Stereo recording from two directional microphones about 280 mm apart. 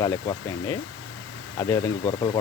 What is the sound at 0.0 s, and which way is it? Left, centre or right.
Speech, centre.